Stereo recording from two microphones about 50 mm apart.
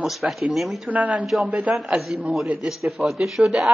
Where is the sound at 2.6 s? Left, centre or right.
Centre.